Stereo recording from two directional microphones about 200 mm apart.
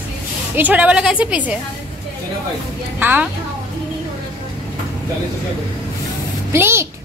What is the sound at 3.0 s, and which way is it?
Speech, 10° right (ahead or behind).